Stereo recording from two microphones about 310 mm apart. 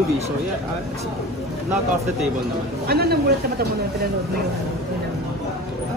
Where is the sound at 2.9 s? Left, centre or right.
Right.